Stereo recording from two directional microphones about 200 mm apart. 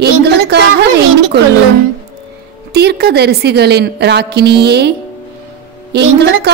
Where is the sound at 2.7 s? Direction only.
55° right (ahead or behind).